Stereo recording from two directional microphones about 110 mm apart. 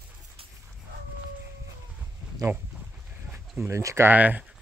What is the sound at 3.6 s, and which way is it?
Speech, 25° right (ahead or behind).